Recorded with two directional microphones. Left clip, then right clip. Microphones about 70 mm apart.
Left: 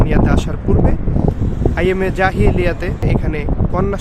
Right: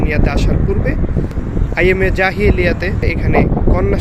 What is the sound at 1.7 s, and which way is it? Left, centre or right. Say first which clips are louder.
Speech: right 5 dB; centre.